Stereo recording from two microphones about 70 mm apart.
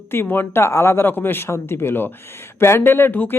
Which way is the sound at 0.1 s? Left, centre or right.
Left.